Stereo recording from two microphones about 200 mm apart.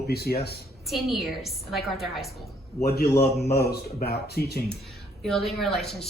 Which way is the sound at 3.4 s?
50° left (ahead or behind).